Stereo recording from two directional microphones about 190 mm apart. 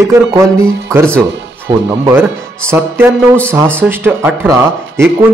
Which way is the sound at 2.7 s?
15° right (ahead or behind).